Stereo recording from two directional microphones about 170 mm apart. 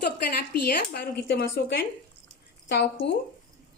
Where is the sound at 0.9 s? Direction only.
70° left (ahead or behind).